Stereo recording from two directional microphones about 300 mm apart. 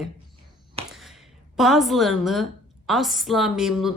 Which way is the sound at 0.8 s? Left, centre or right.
Centre.